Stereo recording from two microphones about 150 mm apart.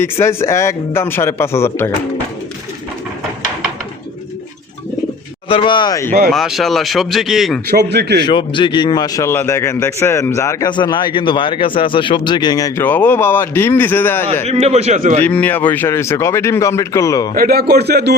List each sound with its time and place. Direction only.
0.0 s speech: 15° left (ahead or behind)
5.5 s speech: 35° left (ahead or behind)
6.1 s speech: 90° right
6.3 s speech: centre (ahead or behind)
7.7 s speech: 90° right
8.2 s a man's voice: 30° left (ahead or behind); by 14.3 s 15° left (ahead or behind)
14.4 s speech: 45° right (ahead or behind)
15.2 s speech: 10° left (ahead or behind)
17.3 s speech: 80° right